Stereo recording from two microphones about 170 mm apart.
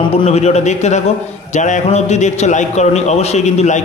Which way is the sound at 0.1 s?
35° left (ahead or behind).